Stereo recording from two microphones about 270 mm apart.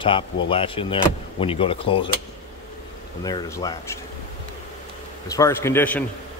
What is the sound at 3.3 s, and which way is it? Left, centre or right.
Speech, centre.